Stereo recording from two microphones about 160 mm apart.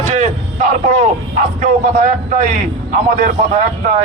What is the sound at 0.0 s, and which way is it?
A man's voice, 50° right (ahead or behind).